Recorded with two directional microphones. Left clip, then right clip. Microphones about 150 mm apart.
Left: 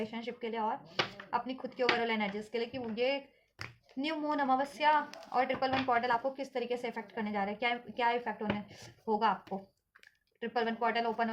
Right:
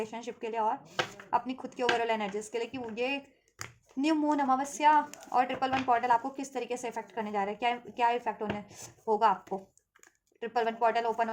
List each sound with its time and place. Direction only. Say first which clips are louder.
0.0 s a woman's voice: right 2 dB; 40° right (ahead or behind)